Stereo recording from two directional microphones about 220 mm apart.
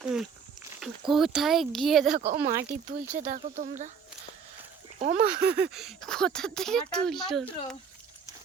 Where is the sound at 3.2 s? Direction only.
35° right (ahead or behind).